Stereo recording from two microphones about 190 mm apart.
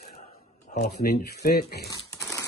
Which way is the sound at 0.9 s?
55° left (ahead or behind).